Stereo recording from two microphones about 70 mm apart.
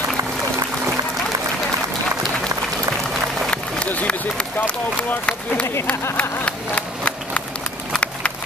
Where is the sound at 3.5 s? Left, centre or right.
Centre.